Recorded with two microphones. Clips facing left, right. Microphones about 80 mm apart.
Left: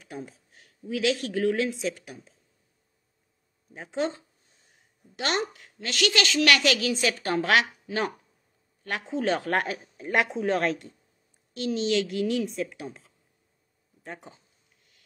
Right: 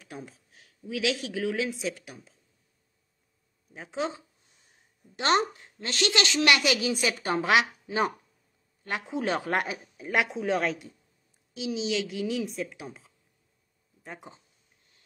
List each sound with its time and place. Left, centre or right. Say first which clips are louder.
0.0 s speech: left 3 dB; centre
3.7 s speech: left 3 dB; centre
4.6 s a sound: even; right
5.8 s a woman's voice: left 1 dB; right
9.1 s speech: left 2 dB; centre